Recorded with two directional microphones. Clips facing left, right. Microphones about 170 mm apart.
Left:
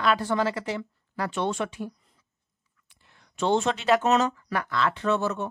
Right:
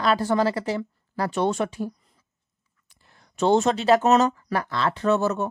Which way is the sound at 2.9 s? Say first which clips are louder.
Right 2 dB; 40° right (ahead or behind).